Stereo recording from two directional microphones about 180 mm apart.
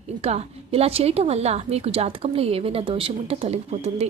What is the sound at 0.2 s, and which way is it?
A woman's voice, 35° right (ahead or behind).